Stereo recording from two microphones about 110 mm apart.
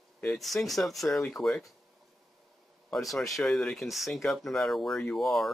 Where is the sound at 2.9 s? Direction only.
Centre (ahead or behind).